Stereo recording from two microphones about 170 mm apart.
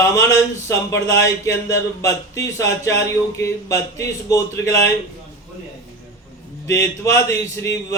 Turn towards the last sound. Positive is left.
turn(degrees=15)  # may be behind; listen again after turning